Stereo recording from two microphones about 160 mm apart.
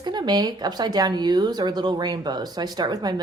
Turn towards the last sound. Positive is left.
turn(degrees=-25)  # may be behind; listen again after turning